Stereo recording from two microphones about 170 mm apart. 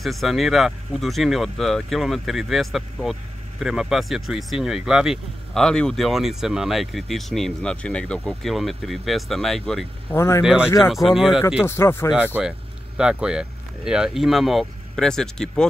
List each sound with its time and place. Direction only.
0.0 s speech: centre (ahead or behind)
10.1 s speech: 15° left (ahead or behind)
10.4 s speech: 5° right (ahead or behind)
11.6 s speech: 15° left (ahead or behind)
12.4 s speech: 5° right (ahead or behind)